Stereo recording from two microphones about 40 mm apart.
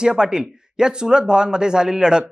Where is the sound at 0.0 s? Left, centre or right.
Centre.